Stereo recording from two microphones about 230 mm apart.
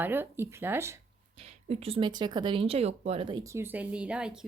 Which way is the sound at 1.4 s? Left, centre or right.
Right.